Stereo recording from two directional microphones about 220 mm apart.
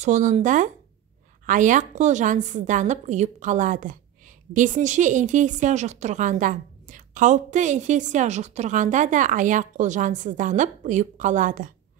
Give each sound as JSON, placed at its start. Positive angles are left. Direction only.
{"t": 0.0, "sound": "a woman's voice", "side_deg": -35}